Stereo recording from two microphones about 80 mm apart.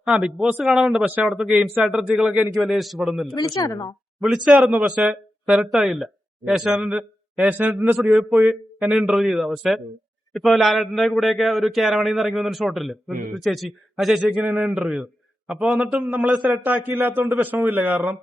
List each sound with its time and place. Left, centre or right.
0.0 s a man's voice: centre
1.0 s a man's voice: centre
3.3 s a woman's voice: left
4.2 s a man's voice: centre
7.4 s speech: centre
7.9 s a man's voice: centre
8.4 s speech: centre
8.9 s a man's voice: centre
16.6 s speech: right